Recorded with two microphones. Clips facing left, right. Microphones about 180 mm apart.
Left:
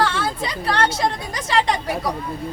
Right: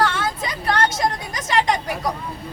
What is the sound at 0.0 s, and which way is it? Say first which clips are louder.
Speech: even; 30° left (ahead or behind).